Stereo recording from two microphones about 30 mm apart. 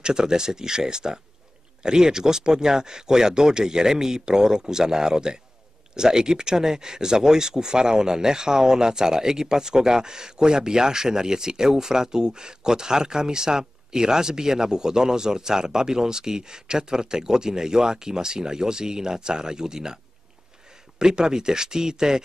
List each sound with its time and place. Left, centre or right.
0.0 s speech: right
21.0 s speech: right